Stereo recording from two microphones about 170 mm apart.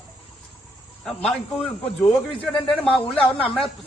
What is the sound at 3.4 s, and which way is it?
Speech, 30° left (ahead or behind).